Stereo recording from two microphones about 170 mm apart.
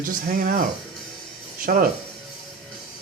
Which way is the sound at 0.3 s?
55° right (ahead or behind).